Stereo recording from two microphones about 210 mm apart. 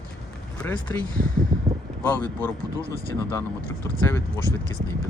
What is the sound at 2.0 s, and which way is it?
Speech, 5° left (ahead or behind).